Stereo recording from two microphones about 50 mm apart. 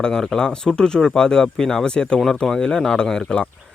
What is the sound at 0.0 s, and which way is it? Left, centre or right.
Speech, centre.